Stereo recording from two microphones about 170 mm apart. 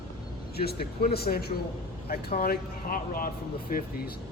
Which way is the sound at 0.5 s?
65° left (ahead or behind).